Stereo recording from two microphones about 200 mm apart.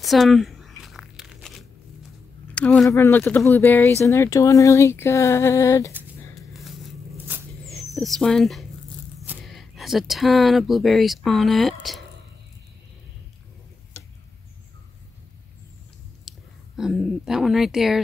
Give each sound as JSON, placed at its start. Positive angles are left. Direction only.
{"t": 0.0, "sound": "tearing", "side_deg": 0}
{"t": 2.5, "sound": "speech", "side_deg": 5}
{"t": 5.9, "sound": "tearing", "side_deg": 0}
{"t": 7.6, "sound": "speech", "side_deg": 0}
{"t": 16.3, "sound": "speech", "side_deg": 0}